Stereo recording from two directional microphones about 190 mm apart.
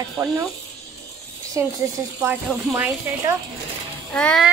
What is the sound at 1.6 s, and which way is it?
Speech, 15° right (ahead or behind).